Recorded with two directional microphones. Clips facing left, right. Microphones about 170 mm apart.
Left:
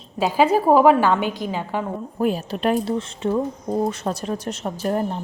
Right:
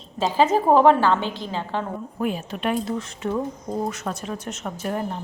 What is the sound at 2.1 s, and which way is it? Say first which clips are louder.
Speech: left 5 dB; 35° left (ahead or behind).